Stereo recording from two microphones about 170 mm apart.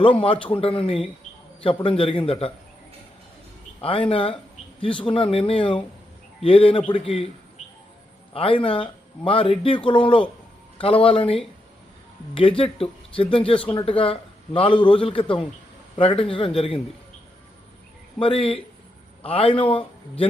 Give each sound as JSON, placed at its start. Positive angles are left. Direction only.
{"t": 0.0, "sound": "speech", "side_deg": 30}
{"t": 3.8, "sound": "speech", "side_deg": 30}
{"t": 8.3, "sound": "speech", "side_deg": 30}
{"t": 18.2, "sound": "speech", "side_deg": 30}